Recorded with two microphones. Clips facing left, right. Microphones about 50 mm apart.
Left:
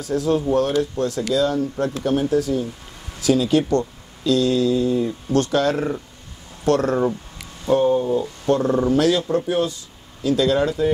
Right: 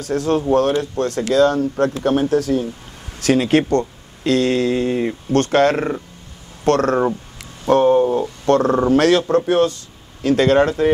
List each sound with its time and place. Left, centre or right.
0.0 s speech: right
8.5 s speech: right
8.7 s speech: right